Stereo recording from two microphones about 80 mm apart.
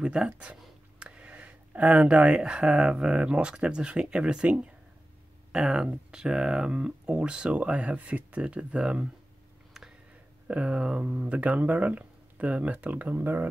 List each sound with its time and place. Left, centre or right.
0.0 s speech: centre
9.8 s a sound: centre
10.5 s speech: centre